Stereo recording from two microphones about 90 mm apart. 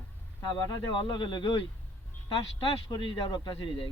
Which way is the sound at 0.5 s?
60° left (ahead or behind).